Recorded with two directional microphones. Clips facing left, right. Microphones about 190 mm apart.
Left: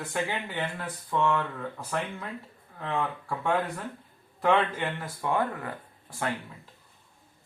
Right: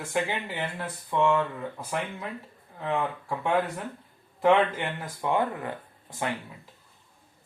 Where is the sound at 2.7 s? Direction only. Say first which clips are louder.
Right 2 dB; 15° right (ahead or behind).